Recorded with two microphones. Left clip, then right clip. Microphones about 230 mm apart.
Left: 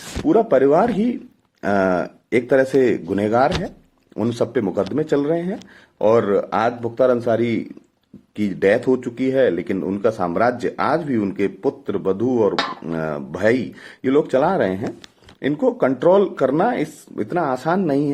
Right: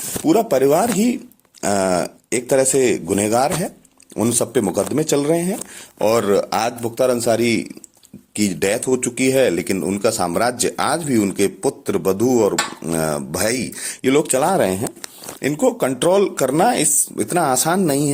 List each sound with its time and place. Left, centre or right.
0.3 s speech: right